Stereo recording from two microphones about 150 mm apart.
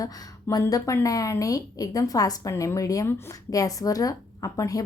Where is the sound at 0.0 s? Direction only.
20° left (ahead or behind).